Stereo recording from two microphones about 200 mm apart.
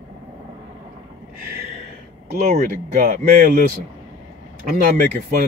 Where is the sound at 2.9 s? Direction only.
45° right (ahead or behind).